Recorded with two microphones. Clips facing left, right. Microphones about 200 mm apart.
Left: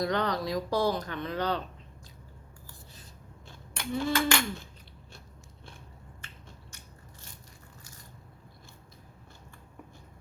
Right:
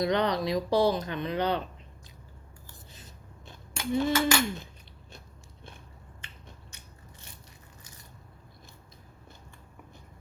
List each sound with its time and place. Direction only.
0.0 s speech: 20° right (ahead or behind)
3.9 s speech: 20° right (ahead or behind)
6.2 s a sound: 20° right (ahead or behind)